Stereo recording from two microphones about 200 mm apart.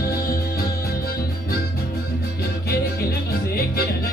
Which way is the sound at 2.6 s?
50° left (ahead or behind).